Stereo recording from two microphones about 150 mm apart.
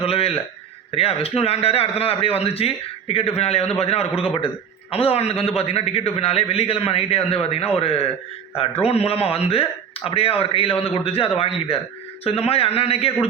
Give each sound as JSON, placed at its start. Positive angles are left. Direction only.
{"t": 0.0, "sound": "a man's voice", "side_deg": 40}